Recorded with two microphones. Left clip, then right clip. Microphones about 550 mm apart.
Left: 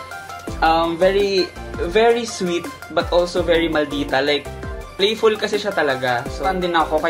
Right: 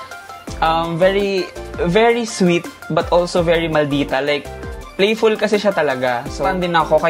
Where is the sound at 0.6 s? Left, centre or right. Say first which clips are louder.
Right 1 dB; right.